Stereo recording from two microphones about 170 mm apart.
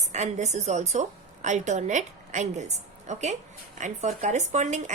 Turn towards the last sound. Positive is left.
turn(degrees=-45)  # may be behind; listen again after turning